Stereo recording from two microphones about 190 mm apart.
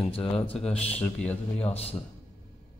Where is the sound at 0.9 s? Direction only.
5° left (ahead or behind).